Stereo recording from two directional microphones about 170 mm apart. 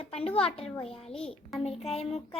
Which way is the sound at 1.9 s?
35° left (ahead or behind).